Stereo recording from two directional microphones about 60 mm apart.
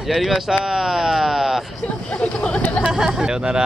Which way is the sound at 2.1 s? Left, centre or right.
Centre.